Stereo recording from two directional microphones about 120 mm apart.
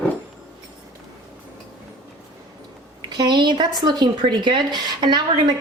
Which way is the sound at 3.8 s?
40° right (ahead or behind).